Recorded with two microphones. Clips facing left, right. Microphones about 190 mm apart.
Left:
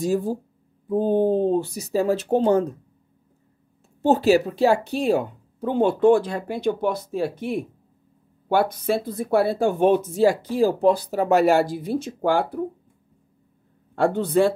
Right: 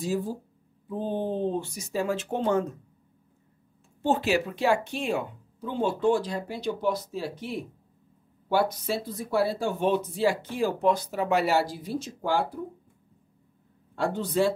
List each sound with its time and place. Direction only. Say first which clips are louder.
0.0 s speech: left 6 dB; 50° left (ahead or behind)
4.0 s speech: left 7 dB; 40° left (ahead or behind)
5.6 s speech: left 8 dB; 55° left (ahead or behind)
10.5 s speech: left 6 dB; 35° left (ahead or behind); by 12.6 s 55° left (ahead or behind)
13.9 s speech: left 7 dB; 55° left (ahead or behind)